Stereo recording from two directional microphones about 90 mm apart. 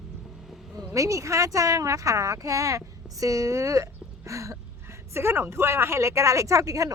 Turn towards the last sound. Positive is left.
turn(degrees=-40)  # may be behind; listen again after turning